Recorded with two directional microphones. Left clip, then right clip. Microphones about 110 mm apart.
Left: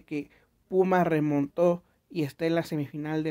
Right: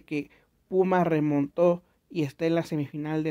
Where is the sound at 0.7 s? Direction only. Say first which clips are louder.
Even; centre (ahead or behind).